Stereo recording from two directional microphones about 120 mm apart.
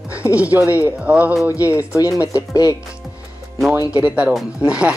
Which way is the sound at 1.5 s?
25° left (ahead or behind).